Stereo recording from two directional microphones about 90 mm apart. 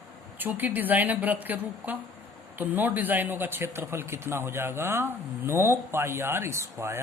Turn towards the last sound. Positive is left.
turn(degrees=-30)  # may be behind; listen again after turning